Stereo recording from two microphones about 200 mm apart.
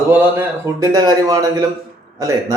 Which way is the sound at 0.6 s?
15° right (ahead or behind).